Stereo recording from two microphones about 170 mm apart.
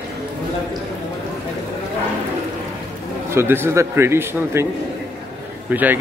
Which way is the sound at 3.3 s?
15° right (ahead or behind).